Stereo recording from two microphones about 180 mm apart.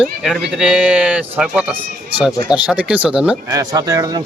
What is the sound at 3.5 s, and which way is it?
Speech, 20° right (ahead or behind).